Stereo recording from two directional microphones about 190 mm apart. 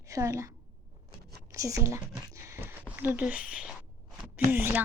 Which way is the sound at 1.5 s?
15° right (ahead or behind).